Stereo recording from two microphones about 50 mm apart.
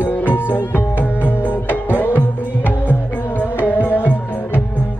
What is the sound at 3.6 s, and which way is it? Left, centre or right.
Music, left.